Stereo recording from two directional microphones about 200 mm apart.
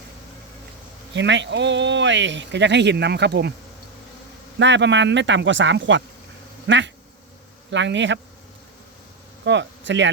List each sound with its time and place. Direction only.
1.1 s speech: 65° right (ahead or behind)
4.6 s speech: 65° right (ahead or behind)
9.4 s speech: 65° right (ahead or behind)